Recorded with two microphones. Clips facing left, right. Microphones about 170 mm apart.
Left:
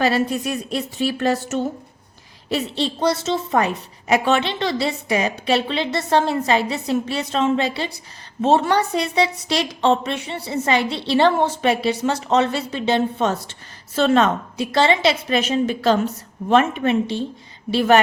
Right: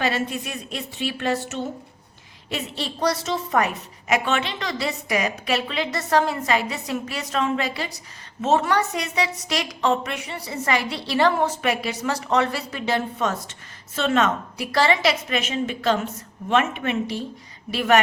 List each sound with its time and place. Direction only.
0.0 s a woman's voice: 40° left (ahead or behind)
2.5 s a woman's voice: 30° left (ahead or behind)